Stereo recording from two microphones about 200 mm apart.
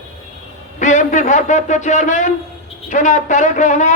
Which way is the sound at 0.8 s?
40° left (ahead or behind).